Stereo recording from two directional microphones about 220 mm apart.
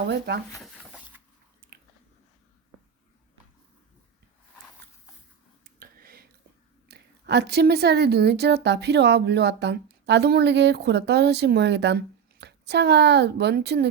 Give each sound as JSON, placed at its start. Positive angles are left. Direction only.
{"t": 0.0, "sound": "a woman's voice", "side_deg": -50}
{"t": 5.8, "sound": "whispering", "side_deg": -45}
{"t": 6.8, "sound": "a woman's voice", "side_deg": -50}